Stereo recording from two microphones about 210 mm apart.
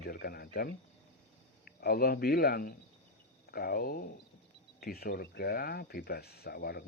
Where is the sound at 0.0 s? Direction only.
45° left (ahead or behind).